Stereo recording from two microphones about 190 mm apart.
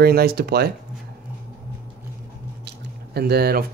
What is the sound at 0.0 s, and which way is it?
Speech, 55° right (ahead or behind).